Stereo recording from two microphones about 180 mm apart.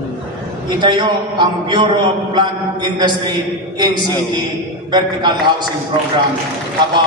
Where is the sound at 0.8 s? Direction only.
25° right (ahead or behind).